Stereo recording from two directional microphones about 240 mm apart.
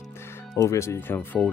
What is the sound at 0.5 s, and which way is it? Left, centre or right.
Speech, centre.